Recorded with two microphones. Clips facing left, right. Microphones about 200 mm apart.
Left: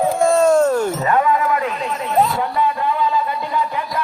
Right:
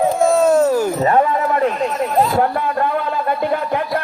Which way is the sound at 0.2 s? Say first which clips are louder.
Even; 5° right (ahead or behind).